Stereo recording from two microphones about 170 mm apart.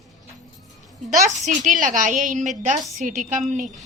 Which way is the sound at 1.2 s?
45° right (ahead or behind).